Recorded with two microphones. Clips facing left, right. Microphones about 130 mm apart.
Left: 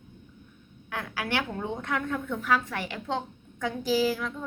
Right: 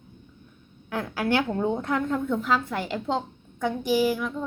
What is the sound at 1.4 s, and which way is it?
A woman's voice, 30° right (ahead or behind).